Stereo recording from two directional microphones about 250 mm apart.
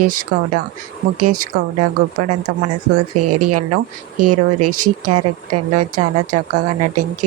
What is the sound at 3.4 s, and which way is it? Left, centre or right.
Speech, right.